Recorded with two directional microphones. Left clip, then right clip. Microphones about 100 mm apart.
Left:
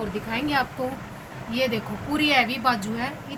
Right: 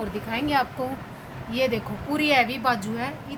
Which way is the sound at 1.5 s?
50° right (ahead or behind).